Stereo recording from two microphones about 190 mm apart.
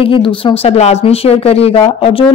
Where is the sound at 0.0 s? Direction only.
25° left (ahead or behind).